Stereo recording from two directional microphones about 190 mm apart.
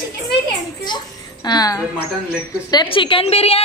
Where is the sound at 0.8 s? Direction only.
20° left (ahead or behind).